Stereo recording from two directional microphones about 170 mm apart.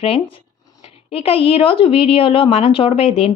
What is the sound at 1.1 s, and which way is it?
A woman's voice, 35° left (ahead or behind).